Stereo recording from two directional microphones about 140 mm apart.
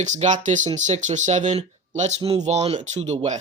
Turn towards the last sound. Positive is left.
turn(degrees=-55)  # may be behind; listen again after turning